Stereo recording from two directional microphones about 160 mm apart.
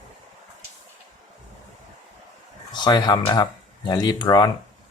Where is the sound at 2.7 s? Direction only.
25° left (ahead or behind).